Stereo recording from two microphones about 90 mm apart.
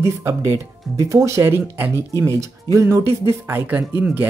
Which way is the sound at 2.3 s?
35° right (ahead or behind).